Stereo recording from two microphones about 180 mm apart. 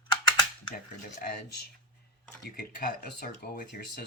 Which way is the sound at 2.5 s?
55° left (ahead or behind).